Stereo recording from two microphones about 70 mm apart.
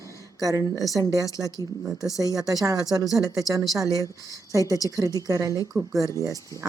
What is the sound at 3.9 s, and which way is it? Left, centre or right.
Speech, left.